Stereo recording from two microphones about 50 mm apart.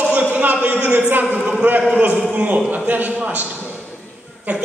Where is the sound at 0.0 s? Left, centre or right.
Right.